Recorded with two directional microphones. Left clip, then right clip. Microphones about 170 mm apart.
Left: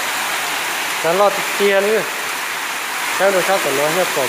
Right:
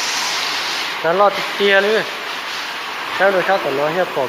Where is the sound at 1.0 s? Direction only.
10° left (ahead or behind).